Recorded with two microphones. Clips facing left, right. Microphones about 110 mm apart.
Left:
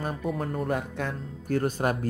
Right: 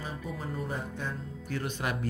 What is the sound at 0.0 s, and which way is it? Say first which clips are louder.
Speech: left 8 dB; 55° left (ahead or behind).